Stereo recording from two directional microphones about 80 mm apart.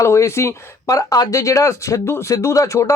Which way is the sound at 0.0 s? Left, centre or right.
Left.